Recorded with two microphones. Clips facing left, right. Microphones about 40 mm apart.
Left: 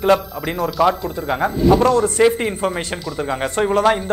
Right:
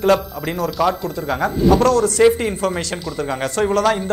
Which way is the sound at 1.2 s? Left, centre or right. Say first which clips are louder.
Even; left.